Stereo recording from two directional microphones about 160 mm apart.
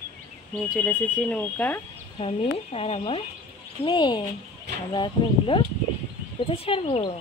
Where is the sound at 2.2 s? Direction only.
35° left (ahead or behind).